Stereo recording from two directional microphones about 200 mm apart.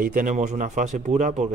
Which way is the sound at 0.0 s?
40° right (ahead or behind).